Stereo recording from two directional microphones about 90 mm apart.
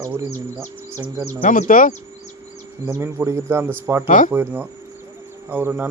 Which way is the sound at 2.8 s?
30° right (ahead or behind).